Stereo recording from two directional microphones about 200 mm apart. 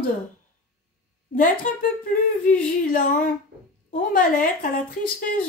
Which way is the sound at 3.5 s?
60° right (ahead or behind).